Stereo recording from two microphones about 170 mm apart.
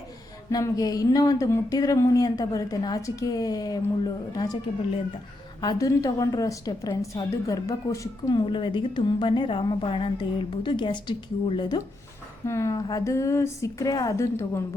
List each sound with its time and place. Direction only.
0.5 s speech: 20° left (ahead or behind)
5.5 s speech: 20° left (ahead or behind)